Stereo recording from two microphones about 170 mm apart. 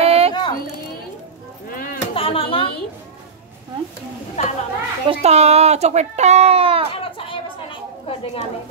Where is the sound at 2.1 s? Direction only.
35° left (ahead or behind).